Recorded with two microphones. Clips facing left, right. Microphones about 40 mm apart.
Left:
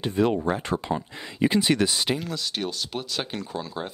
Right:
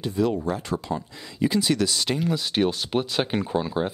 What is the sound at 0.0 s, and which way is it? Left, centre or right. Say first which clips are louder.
Speech: left 1 dB; left.